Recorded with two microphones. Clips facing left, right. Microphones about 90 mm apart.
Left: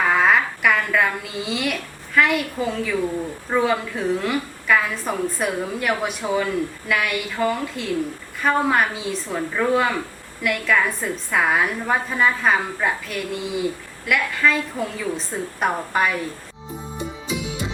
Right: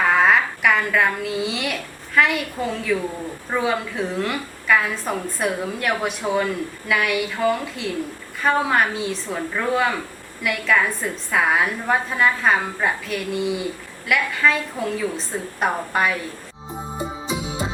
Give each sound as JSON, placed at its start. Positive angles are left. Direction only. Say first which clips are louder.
{"t": 0.1, "sound": "a woman's voice", "louder": "right 1 dB", "side_deg": 0}
{"t": 17.0, "sound": "music", "louder": "right 1 dB", "side_deg": -25}